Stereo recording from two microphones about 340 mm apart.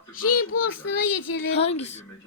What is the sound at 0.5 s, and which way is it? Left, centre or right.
Female singing, left.